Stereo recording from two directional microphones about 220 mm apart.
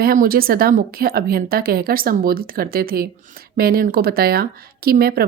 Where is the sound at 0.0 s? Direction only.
40° right (ahead or behind).